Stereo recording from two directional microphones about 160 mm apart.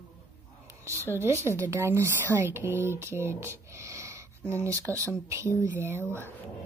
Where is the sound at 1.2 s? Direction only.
15° right (ahead or behind).